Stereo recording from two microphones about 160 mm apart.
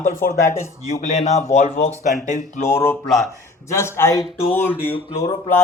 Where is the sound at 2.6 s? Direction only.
15° left (ahead or behind).